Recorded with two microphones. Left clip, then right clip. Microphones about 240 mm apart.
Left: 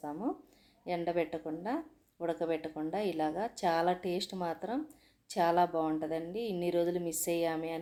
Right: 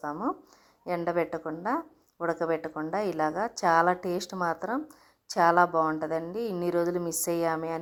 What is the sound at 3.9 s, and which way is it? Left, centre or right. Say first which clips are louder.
Speech: right 4 dB; right.